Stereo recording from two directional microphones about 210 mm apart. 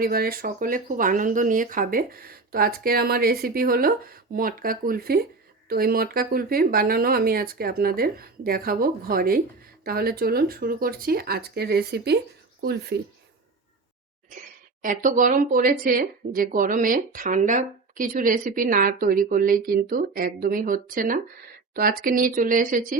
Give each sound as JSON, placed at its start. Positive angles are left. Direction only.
{"t": 0.0, "sound": "speech", "side_deg": -45}
{"t": 14.8, "sound": "speech", "side_deg": -40}